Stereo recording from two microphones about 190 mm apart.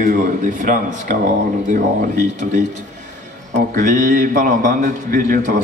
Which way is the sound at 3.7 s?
45° right (ahead or behind).